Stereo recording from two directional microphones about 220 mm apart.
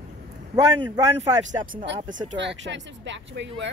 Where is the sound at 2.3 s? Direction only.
55° right (ahead or behind).